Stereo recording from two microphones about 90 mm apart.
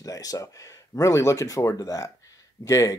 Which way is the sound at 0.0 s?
40° left (ahead or behind).